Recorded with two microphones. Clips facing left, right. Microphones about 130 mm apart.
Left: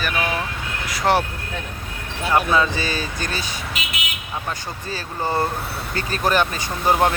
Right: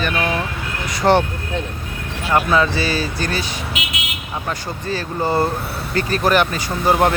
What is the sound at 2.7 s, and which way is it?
Speech, 40° right (ahead or behind).